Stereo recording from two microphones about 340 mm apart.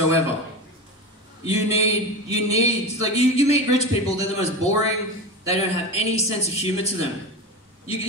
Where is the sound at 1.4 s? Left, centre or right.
Centre.